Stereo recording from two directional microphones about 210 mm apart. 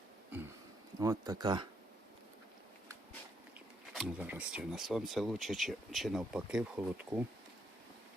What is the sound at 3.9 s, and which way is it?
Speech, 5° right (ahead or behind).